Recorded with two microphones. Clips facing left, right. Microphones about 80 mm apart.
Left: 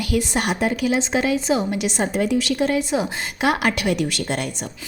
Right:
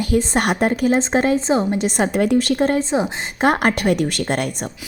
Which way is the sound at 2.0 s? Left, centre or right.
Right.